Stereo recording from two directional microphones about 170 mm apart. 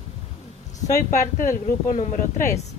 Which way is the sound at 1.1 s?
50° left (ahead or behind).